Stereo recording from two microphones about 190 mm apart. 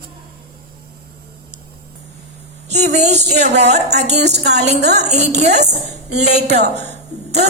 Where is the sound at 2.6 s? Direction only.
35° right (ahead or behind).